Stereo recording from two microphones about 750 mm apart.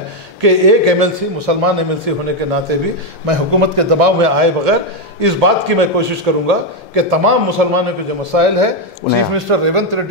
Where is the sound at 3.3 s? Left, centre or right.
Right.